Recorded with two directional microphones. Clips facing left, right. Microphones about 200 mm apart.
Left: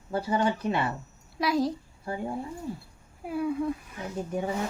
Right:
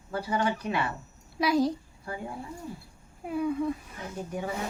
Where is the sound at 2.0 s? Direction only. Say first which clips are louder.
Left 5 dB; 25° left (ahead or behind).